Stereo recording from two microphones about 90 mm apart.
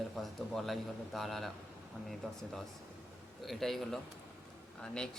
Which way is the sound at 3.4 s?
Centre (ahead or behind).